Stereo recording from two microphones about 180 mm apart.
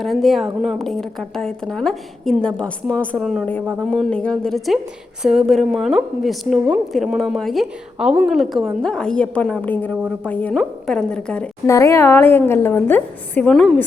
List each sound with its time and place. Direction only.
0.0 s a woman's voice: centre (ahead or behind)
11.6 s a woman's voice: 15° left (ahead or behind)